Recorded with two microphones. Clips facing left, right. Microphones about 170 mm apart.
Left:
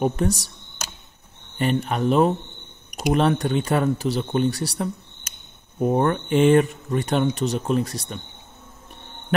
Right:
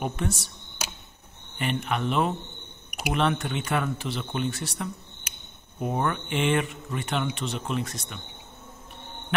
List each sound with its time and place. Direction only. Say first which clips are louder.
0.0 s speech: left 8 dB; 40° left (ahead or behind)
1.6 s speech: left 6 dB; 40° left (ahead or behind)